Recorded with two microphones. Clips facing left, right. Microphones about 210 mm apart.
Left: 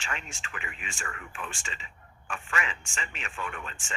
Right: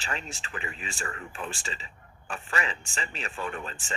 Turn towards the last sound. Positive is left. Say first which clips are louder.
# right 4 dB
turn(degrees=-35)  # may be behind; listen again after turning